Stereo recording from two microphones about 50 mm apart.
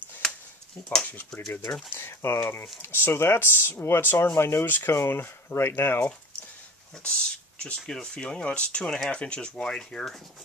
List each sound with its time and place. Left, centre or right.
1.9 s speech: left
4.0 s speech: left
4.4 s speech: left
4.6 s speech: left
4.9 s speech: left
7.0 s speech: left